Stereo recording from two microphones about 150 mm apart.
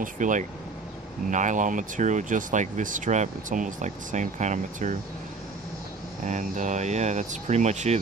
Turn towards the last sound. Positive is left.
turn(degrees=-50)  # may be behind; listen again after turning